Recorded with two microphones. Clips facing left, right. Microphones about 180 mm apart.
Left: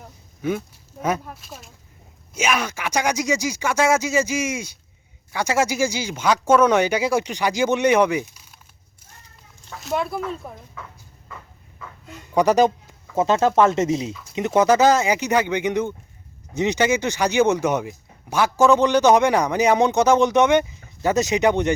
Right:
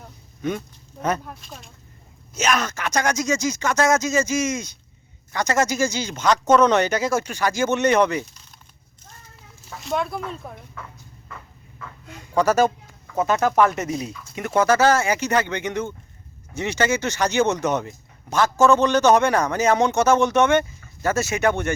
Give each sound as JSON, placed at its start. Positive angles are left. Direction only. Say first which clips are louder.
{"t": 0.4, "sound": "speech", "louder": "left 2 dB", "side_deg": 5}
{"t": 9.6, "sound": "speech", "louder": "left 1 dB", "side_deg": 0}
{"t": 11.8, "sound": "a sound", "louder": "even", "side_deg": 0}
{"t": 12.3, "sound": "speech", "louder": "left 2 dB", "side_deg": 15}